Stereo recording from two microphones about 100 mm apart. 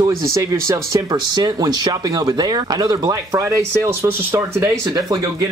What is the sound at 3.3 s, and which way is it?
A man's voice, 30° right (ahead or behind).